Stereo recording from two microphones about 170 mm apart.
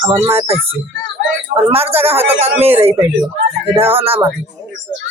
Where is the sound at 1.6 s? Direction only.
35° right (ahead or behind).